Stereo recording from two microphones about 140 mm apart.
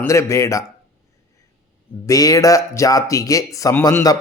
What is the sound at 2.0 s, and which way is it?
Speech, 25° left (ahead or behind).